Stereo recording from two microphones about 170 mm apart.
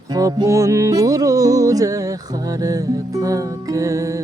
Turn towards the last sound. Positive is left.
turn(degrees=-20)  # may be behind; listen again after turning